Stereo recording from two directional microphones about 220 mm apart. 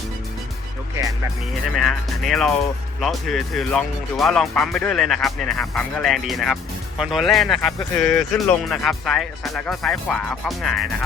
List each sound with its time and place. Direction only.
1.7 s speech: centre (ahead or behind)